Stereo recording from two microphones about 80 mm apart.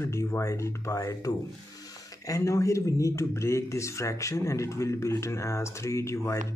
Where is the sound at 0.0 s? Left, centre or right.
Left.